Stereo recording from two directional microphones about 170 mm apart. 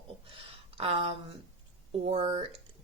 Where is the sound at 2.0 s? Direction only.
35° right (ahead or behind).